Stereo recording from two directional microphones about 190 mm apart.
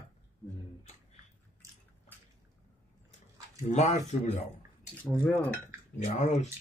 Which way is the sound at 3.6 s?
40° left (ahead or behind).